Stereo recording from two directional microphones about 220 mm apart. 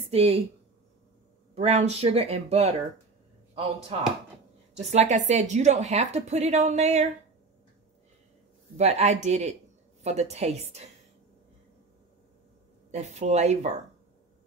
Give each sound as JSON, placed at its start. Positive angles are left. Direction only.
{"t": 0.1, "sound": "speech", "side_deg": -25}
{"t": 1.5, "sound": "speech", "side_deg": -30}
{"t": 4.9, "sound": "a woman's voice", "side_deg": -30}
{"t": 8.7, "sound": "speech", "side_deg": -30}
{"t": 12.9, "sound": "a woman's voice", "side_deg": -30}